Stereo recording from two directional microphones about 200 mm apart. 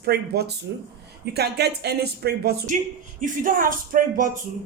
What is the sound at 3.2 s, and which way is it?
A woman's voice, 40° right (ahead or behind).